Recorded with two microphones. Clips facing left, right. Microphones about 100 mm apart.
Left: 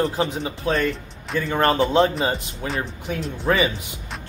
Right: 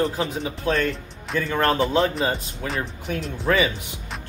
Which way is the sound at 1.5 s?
35° left (ahead or behind).